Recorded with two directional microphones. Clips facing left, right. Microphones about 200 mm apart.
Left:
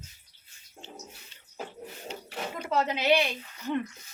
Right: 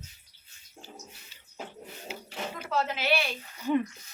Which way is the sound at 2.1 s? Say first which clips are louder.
Left 1 dB; 5° right (ahead or behind).